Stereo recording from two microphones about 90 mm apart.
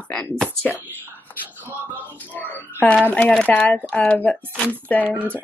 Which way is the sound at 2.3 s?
20° left (ahead or behind).